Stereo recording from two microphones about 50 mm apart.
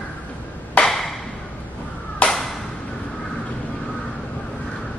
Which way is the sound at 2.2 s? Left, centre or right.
Left.